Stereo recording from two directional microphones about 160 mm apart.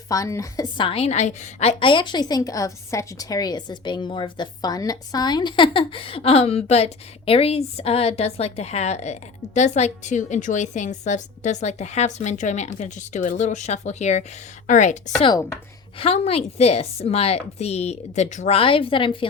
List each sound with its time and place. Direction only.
0.1 s a woman's voice: 20° left (ahead or behind); by 15.1 s 50° left (ahead or behind)
15.2 s speech: 25° left (ahead or behind)
16.0 s a woman's voice: 40° left (ahead or behind)